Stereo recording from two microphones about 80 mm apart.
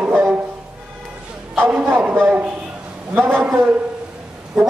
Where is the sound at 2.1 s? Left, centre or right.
Right.